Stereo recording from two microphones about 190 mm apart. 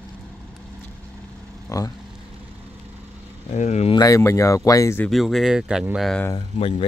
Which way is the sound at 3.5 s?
35° left (ahead or behind).